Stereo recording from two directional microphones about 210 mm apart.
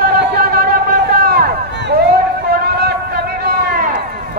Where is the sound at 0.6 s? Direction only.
45° right (ahead or behind).